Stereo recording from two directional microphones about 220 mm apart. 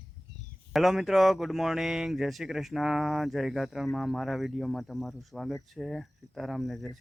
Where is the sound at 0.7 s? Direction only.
Centre (ahead or behind).